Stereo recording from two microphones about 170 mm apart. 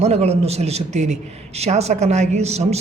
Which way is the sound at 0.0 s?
40° right (ahead or behind).